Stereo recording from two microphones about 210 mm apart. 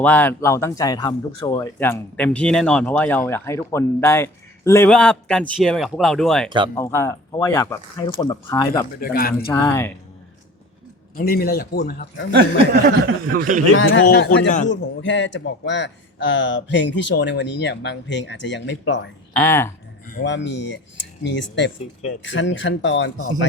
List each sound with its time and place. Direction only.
0.0 s speech: 10° left (ahead or behind)
6.7 s speech: 15° left (ahead or behind)
9.0 s a man's voice: 45° left (ahead or behind)
9.5 s speech: 15° left (ahead or behind)
11.2 s a man's voice: 45° left (ahead or behind)
12.4 s speech: 45° right (ahead or behind)
13.7 s speech: 65° left (ahead or behind)
14.0 s a man's voice: 45° left (ahead or behind)
19.4 s speech: 10° left (ahead or behind)
20.1 s speech: 50° left (ahead or behind)